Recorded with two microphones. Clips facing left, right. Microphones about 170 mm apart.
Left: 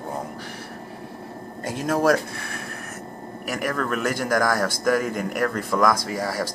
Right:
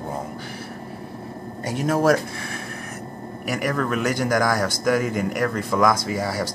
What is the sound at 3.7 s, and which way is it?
Speech, 15° right (ahead or behind).